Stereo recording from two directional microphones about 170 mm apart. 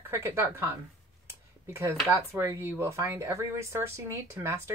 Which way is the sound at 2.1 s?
15° right (ahead or behind).